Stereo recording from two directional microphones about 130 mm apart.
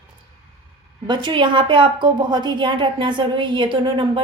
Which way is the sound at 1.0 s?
35° right (ahead or behind).